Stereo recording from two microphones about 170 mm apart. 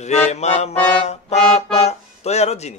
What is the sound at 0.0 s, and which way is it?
Music, 40° left (ahead or behind).